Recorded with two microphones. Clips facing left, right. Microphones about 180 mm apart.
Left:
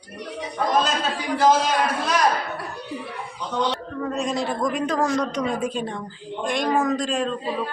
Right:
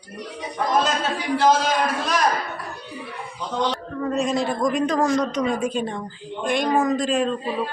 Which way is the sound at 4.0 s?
Centre (ahead or behind).